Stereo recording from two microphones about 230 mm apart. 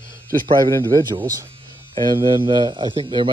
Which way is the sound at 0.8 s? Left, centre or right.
Centre.